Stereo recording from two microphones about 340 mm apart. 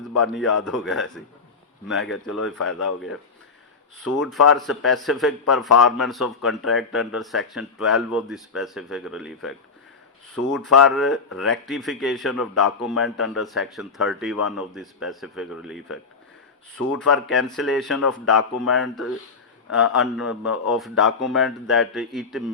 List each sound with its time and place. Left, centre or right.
0.3 s a man's voice: centre
2.4 s speech: left
4.2 s a man's voice: centre
10.5 s a man's voice: centre
17.1 s a man's voice: centre